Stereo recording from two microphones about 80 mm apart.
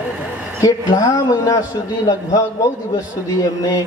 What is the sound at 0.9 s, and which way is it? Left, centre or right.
Speech, left.